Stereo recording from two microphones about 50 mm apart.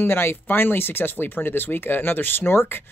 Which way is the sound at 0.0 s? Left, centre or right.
Left.